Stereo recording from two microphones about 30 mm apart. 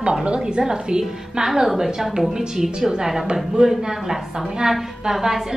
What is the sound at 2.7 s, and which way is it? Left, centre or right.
Speech, right.